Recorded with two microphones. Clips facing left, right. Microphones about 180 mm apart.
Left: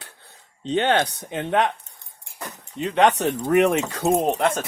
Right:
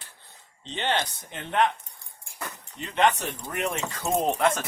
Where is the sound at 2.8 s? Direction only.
70° left (ahead or behind).